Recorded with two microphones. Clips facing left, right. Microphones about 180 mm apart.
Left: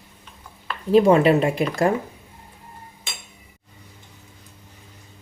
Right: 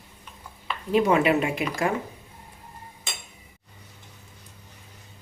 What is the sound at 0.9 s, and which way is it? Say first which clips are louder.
Speech: left 6 dB; 35° left (ahead or behind).